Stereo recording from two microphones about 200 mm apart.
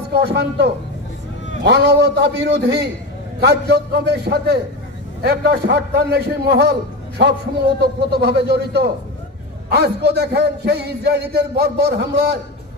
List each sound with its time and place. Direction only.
0.1 s a man's voice: 55° right (ahead or behind)